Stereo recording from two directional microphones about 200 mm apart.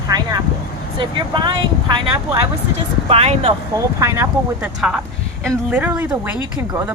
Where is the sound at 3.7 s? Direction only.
15° right (ahead or behind).